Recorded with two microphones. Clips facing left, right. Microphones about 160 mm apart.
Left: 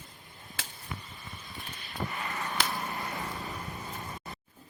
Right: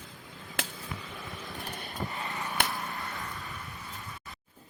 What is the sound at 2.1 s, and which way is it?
Vehicle, 20° right (ahead or behind).